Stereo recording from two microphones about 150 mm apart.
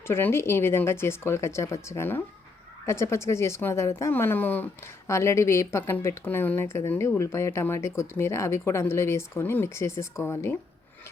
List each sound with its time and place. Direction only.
0.1 s a woman's voice: 15° left (ahead or behind)